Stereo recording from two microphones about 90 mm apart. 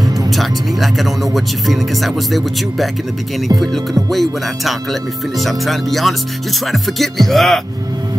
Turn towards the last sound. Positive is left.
turn(degrees=0)  # may be behind; listen again after turning